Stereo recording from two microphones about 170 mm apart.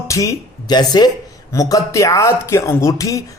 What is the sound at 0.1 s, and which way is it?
A man's voice, 20° left (ahead or behind).